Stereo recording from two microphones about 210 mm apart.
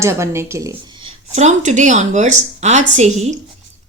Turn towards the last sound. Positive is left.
turn(degrees=-35)  # may be behind; listen again after turning